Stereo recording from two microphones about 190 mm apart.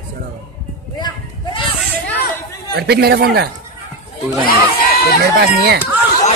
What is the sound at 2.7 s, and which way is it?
Speech, 55° right (ahead or behind).